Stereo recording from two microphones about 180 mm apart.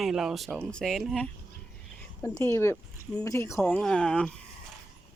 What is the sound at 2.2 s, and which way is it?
Speech, 15° left (ahead or behind).